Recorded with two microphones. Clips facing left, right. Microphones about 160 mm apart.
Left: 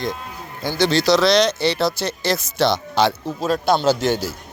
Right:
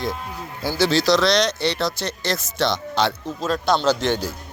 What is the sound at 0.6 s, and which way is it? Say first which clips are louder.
A man's voice: left 1 dB; 5° right (ahead or behind).